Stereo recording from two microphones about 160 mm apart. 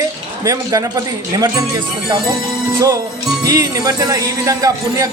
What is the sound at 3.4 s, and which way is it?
Speech, 25° right (ahead or behind).